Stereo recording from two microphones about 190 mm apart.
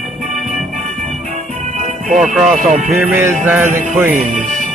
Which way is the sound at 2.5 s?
40° right (ahead or behind).